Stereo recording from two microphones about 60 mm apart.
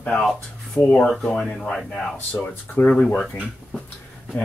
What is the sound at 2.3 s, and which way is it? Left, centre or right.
Speech, left.